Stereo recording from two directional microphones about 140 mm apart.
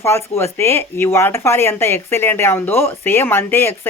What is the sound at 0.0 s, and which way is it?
Speech, 20° left (ahead or behind).